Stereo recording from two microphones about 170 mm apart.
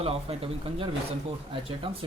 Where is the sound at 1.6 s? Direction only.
30° right (ahead or behind).